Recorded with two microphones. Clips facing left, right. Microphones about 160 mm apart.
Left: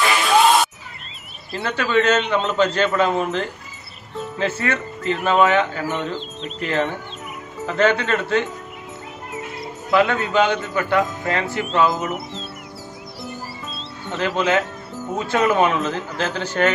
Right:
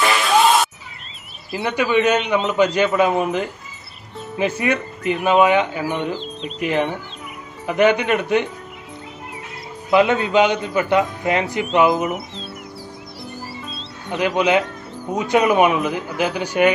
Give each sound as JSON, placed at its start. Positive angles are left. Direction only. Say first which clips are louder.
{"t": 0.0, "sound": "music", "louder": "even", "side_deg": 0}
{"t": 1.6, "sound": "a man's voice", "louder": "right 2 dB", "side_deg": -15}
{"t": 9.8, "sound": "a man's voice", "louder": "right 2 dB", "side_deg": -20}
{"t": 14.1, "sound": "a man's voice", "louder": "right 2 dB", "side_deg": -15}